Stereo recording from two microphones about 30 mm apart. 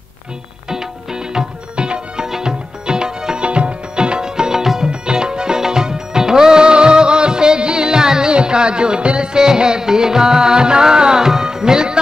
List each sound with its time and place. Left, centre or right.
1.8 s music: right
2.2 s music: centre
4.8 s music: right